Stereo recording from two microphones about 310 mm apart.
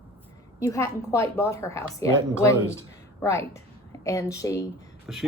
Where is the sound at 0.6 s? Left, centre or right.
Centre.